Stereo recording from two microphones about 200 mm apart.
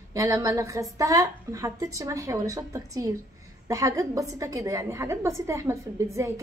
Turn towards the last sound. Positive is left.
turn(degrees=-15)  # may be behind; listen again after turning